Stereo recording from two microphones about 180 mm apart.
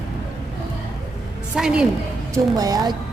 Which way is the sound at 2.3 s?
20° right (ahead or behind).